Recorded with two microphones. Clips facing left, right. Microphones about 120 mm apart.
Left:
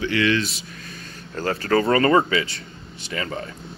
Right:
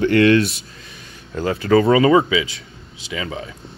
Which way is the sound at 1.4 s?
15° right (ahead or behind).